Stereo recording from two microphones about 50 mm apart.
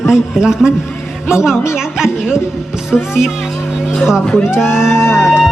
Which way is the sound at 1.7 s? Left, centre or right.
Centre.